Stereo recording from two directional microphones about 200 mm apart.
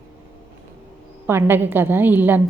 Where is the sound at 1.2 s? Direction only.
10° right (ahead or behind).